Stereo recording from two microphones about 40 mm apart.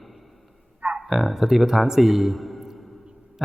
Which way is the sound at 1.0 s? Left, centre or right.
Centre.